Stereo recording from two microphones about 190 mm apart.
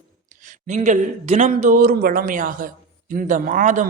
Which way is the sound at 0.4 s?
40° right (ahead or behind).